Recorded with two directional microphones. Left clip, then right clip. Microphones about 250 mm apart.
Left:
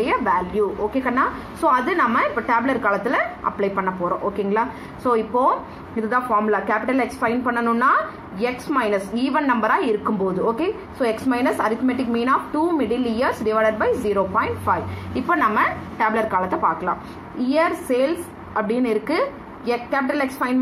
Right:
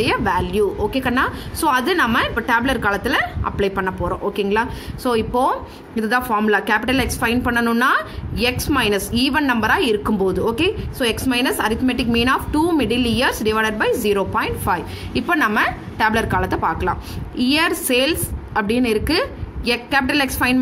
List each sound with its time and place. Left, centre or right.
0.0 s a woman's voice: right